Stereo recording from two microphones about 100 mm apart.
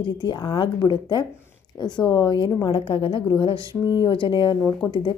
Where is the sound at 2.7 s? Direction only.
65° left (ahead or behind).